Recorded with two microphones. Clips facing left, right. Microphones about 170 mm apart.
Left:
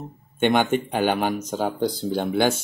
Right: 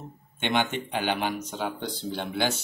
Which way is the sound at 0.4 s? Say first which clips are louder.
Left 7 dB; 50° left (ahead or behind).